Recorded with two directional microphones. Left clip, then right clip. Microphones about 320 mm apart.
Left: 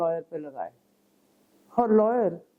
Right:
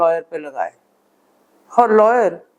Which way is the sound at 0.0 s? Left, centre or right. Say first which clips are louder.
Right 11 dB; centre.